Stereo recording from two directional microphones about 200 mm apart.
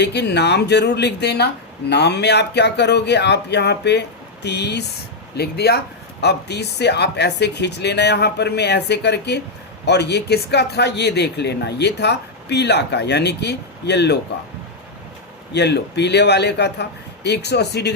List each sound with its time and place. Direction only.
0.0 s speech: 60° left (ahead or behind)
15.5 s speech: 55° left (ahead or behind)